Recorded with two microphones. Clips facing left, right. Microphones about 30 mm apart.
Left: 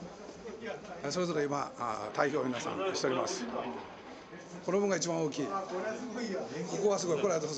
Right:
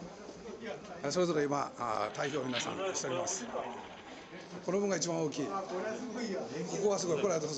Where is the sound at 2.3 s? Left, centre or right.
Right.